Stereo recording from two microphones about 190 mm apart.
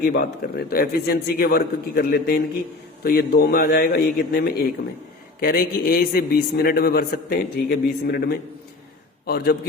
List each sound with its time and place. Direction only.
0.0 s a man's voice: 55° left (ahead or behind)